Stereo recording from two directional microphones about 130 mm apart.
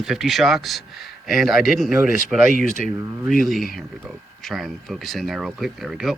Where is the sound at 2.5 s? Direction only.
75° right (ahead or behind).